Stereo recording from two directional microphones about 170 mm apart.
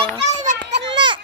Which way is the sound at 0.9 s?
25° right (ahead or behind).